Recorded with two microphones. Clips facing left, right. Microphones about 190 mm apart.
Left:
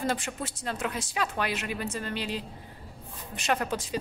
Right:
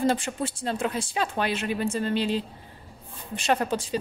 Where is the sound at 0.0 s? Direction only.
30° right (ahead or behind).